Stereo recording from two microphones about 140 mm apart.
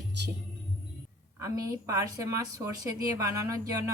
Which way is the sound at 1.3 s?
25° right (ahead or behind).